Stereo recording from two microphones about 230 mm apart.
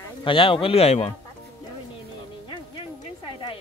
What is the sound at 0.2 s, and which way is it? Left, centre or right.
Speech, left.